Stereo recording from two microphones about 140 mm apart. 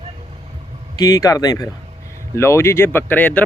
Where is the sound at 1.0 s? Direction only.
25° left (ahead or behind).